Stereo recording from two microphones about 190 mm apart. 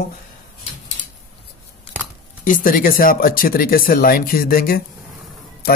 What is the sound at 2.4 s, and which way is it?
Speech, 45° left (ahead or behind).